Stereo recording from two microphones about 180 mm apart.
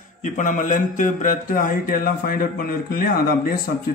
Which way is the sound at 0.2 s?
45° left (ahead or behind).